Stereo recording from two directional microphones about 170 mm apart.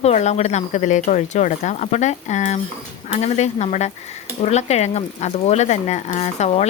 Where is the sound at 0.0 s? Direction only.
40° left (ahead or behind).